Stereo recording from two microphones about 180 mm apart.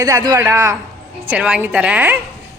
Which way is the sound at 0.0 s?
20° right (ahead or behind).